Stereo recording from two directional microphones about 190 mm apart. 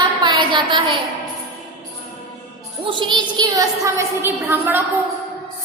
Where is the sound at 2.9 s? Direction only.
25° right (ahead or behind).